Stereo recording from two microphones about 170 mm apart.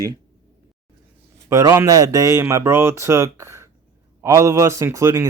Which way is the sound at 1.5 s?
20° right (ahead or behind).